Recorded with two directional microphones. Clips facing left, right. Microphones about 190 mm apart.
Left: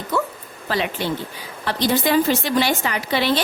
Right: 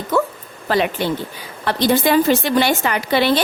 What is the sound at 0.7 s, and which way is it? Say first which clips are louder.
A woman's voice: right 5 dB; 60° right (ahead or behind).